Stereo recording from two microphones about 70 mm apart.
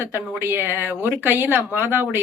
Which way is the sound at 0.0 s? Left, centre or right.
Right.